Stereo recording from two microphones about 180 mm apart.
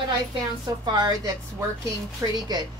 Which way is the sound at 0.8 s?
25° right (ahead or behind).